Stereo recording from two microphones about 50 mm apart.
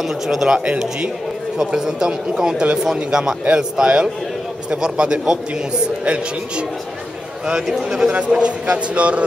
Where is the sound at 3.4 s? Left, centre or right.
Right.